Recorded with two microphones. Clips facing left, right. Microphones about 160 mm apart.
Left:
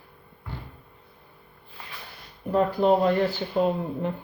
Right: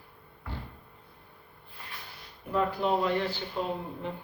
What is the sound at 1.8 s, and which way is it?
Snort, 90° left.